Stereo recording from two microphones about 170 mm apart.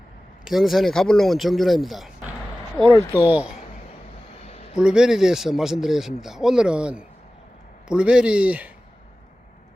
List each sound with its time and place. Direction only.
0.4 s speech: centre (ahead or behind)
4.4 s a sound: 40° left (ahead or behind)
4.8 s speech: 5° right (ahead or behind)